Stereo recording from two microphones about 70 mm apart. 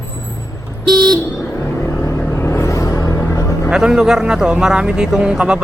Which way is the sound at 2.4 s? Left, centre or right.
Left.